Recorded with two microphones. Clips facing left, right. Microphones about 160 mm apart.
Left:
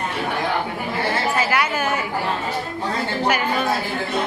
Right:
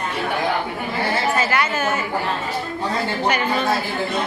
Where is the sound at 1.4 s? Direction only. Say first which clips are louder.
Even; 10° left (ahead or behind).